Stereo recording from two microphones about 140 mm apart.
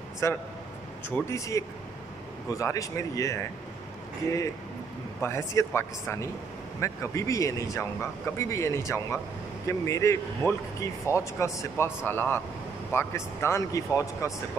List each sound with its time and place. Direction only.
0.2 s speech: 20° left (ahead or behind)
5.2 s speech: 20° left (ahead or behind)